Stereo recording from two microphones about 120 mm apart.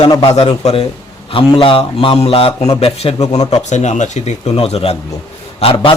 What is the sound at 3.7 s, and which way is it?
Speech, 80° left.